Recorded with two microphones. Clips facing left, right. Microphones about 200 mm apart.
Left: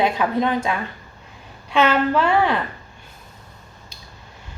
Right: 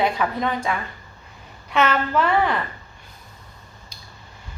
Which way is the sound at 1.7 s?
25° left (ahead or behind).